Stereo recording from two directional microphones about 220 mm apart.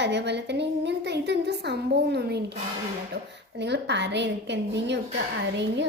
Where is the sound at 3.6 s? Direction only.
50° right (ahead or behind).